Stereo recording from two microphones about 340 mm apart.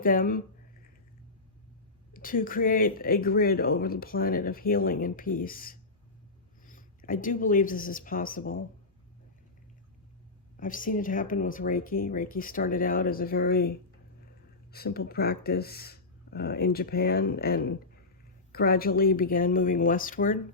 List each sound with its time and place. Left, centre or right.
0.0 s speech: left
2.1 s speech: left
10.6 s speech: left